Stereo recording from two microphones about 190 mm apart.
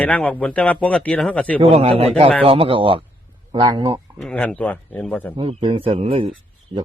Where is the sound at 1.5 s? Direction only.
30° right (ahead or behind).